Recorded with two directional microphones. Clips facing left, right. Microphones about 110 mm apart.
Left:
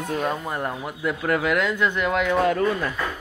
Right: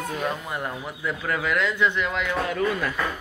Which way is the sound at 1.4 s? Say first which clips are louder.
Right 2 dB; 45° left (ahead or behind).